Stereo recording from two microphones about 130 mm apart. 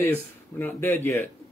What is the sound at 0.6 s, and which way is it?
Speech, 20° left (ahead or behind).